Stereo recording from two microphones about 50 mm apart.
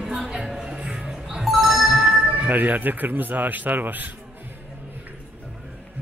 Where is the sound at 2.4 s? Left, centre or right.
Right.